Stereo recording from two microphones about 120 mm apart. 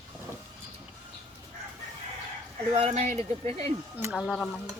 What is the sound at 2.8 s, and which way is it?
Speech, 70° right (ahead or behind).